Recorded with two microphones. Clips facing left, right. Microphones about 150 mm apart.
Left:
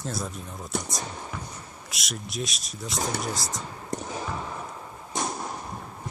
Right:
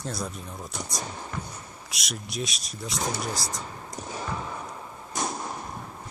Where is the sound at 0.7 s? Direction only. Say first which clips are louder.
Left 7 dB; 60° left (ahead or behind).